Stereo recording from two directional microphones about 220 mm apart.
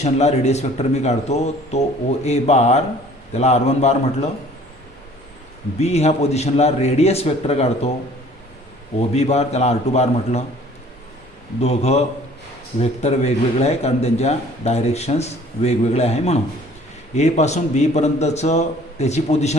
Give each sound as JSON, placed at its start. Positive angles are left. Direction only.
{"t": 0.0, "sound": "a man's voice", "side_deg": 30}
{"t": 5.8, "sound": "a man's voice", "side_deg": 30}
{"t": 9.0, "sound": "a man's voice", "side_deg": 30}
{"t": 11.6, "sound": "a man's voice", "side_deg": 30}